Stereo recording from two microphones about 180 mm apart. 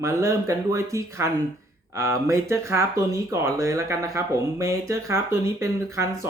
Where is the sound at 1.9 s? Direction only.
15° right (ahead or behind).